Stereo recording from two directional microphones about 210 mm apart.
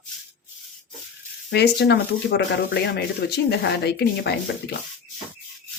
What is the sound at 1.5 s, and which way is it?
Speech, 55° left (ahead or behind).